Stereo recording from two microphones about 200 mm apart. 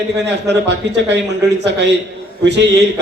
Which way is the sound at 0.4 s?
60° right (ahead or behind).